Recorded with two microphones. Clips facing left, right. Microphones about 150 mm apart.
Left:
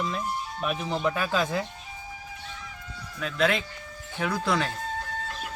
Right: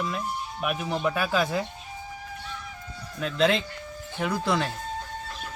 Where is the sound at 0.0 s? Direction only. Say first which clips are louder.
Even; 5° right (ahead or behind).